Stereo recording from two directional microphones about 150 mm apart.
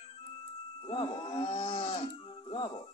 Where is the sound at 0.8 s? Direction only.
35° left (ahead or behind).